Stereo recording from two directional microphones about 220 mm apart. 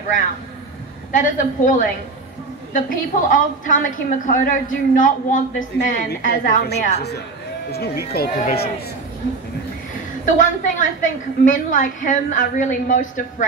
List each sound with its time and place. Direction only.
1.1 s a woman's voice: 35° left (ahead or behind)
10.2 s a woman's voice: 35° left (ahead or behind)